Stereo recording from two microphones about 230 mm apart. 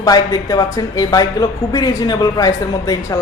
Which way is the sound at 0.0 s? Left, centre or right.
Centre.